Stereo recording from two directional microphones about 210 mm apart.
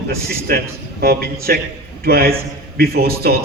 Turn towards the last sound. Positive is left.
turn(degrees=-45)  # may be behind; listen again after turning